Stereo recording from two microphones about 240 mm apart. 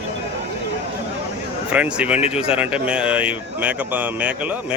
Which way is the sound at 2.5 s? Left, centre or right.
Centre.